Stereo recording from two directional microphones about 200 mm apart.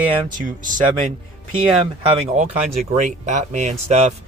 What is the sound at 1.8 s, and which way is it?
Speech, 30° right (ahead or behind).